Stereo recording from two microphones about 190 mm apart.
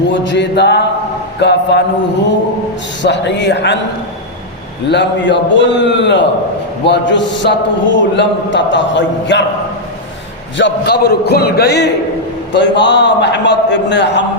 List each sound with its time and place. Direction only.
0.1 s a man's voice: 70° left (ahead or behind)
3.0 s a man's voice: 65° left (ahead or behind)
4.9 s a man's voice: 65° left (ahead or behind)
10.6 s a man's voice: 60° left (ahead or behind)